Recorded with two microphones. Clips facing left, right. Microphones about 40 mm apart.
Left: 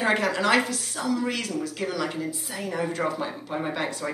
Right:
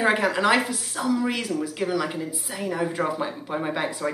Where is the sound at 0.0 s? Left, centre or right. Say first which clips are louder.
Right 2 dB; centre.